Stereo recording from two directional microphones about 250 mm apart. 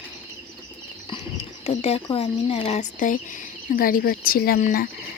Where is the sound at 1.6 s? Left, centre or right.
Left.